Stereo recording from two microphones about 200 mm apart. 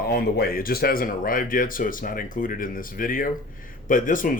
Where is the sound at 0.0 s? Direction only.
50° left (ahead or behind).